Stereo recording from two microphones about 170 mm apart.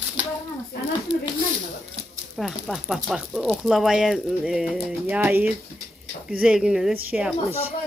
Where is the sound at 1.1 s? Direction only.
45° right (ahead or behind).